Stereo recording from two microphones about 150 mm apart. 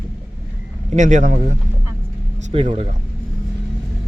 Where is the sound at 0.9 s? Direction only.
55° right (ahead or behind).